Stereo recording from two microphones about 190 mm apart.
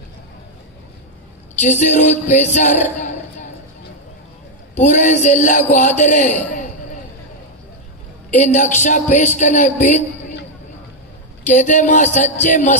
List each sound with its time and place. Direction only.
1.6 s a sound: 40° left (ahead or behind)
4.7 s speech: 40° left (ahead or behind)
8.4 s speech: 40° left (ahead or behind)
11.4 s speech: 40° left (ahead or behind)